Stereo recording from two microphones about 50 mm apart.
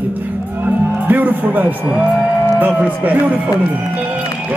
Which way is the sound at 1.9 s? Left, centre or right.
Right.